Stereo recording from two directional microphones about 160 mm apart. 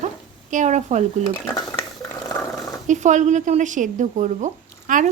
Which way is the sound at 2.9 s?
50° right (ahead or behind).